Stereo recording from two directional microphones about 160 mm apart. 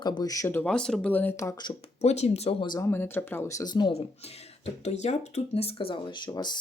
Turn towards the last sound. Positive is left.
turn(degrees=25)  # may be behind; listen again after turning